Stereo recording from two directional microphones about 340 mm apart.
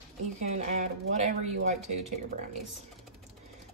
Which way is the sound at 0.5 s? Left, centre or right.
Right.